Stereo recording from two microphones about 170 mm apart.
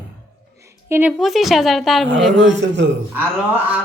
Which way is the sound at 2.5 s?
90° right.